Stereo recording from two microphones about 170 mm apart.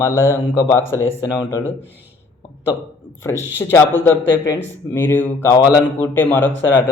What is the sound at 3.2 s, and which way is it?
A man's voice, 15° left (ahead or behind).